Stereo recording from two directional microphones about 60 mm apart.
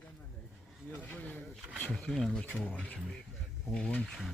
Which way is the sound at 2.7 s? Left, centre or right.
Left.